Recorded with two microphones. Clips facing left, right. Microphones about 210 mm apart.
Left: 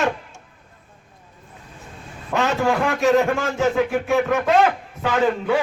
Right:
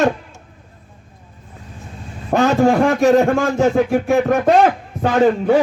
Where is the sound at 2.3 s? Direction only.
40° right (ahead or behind).